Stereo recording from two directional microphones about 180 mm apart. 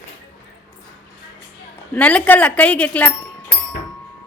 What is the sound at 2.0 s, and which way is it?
Speech, 5° left (ahead or behind).